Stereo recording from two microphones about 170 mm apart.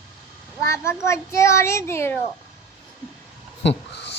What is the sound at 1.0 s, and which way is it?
A child's voice, 15° left (ahead or behind).